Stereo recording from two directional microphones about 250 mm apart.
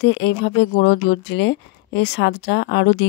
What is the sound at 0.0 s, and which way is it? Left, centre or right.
Speech, left.